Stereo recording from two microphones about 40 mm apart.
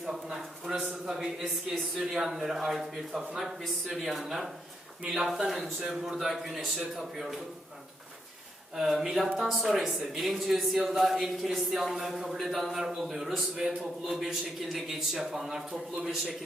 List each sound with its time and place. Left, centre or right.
0.7 s a man's voice: centre
8.7 s a man's voice: centre